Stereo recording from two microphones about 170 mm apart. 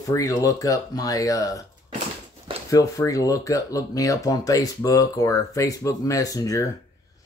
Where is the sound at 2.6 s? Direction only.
20° left (ahead or behind).